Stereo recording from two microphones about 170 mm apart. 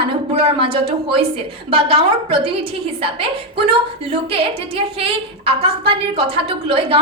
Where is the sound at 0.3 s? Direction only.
35° right (ahead or behind).